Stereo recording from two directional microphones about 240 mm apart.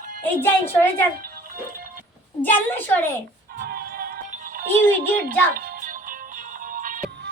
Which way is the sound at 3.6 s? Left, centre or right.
Right.